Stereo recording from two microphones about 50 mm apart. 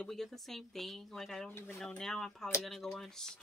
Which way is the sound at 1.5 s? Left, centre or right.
Left.